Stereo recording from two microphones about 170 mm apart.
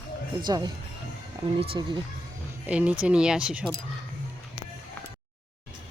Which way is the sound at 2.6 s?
10° right (ahead or behind).